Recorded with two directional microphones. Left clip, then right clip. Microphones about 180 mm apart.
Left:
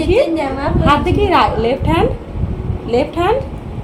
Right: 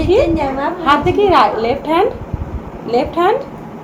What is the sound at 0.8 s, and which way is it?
A woman's voice, 15° left (ahead or behind).